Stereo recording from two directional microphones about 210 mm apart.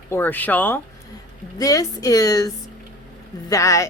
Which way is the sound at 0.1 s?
10° left (ahead or behind).